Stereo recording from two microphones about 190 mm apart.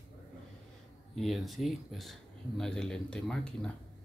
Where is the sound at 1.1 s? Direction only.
Centre (ahead or behind).